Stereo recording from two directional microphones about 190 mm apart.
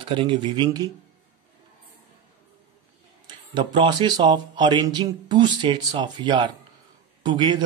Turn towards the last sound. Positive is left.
turn(degrees=-25)  # may be behind; listen again after turning